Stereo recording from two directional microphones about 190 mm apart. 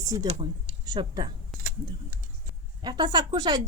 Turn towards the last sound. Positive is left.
turn(degrees=-25)  # may be behind; listen again after turning